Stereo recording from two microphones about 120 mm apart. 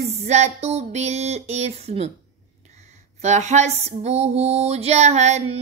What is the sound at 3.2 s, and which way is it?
Child singing, 75° right (ahead or behind).